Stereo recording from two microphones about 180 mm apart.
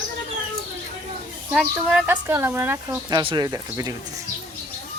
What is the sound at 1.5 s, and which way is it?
Speech, 5° right (ahead or behind).